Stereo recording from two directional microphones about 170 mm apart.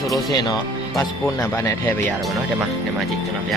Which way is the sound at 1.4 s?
15° left (ahead or behind).